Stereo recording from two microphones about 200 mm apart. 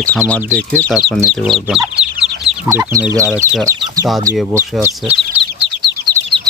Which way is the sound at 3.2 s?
5° right (ahead or behind).